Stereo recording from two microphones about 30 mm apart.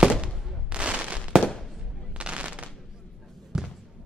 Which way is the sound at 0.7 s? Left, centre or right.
Right.